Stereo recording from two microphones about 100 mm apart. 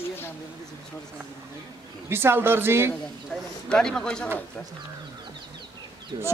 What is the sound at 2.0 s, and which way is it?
Speech, 25° right (ahead or behind).